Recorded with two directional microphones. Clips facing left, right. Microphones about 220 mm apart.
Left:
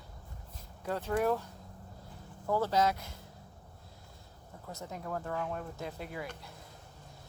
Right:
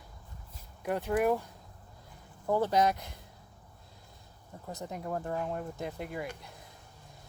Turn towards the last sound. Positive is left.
turn(degrees=-15)  # may be behind; listen again after turning